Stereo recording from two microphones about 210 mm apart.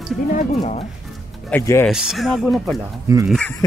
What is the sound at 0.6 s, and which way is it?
Speech, 30° left (ahead or behind).